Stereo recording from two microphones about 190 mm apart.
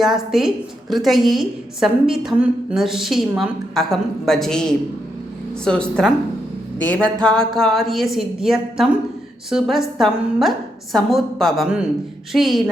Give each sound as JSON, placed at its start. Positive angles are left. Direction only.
{"t": 0.0, "sound": "a woman's voice", "side_deg": 0}